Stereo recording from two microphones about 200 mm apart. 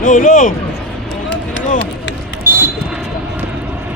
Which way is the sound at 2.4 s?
10° right (ahead or behind).